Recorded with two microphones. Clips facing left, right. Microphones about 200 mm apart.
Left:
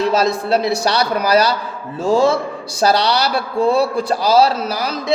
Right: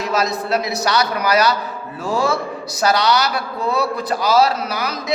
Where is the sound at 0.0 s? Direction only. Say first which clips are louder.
Left 4 dB; 30° left (ahead or behind).